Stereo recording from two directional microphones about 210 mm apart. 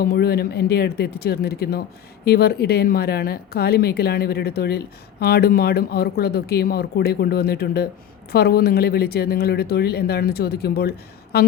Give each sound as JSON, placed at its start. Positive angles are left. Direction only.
{"t": 0.0, "sound": "speech", "side_deg": 50}